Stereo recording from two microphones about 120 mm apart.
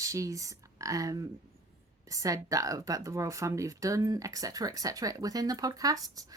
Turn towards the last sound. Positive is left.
turn(degrees=-30)  # may be behind; listen again after turning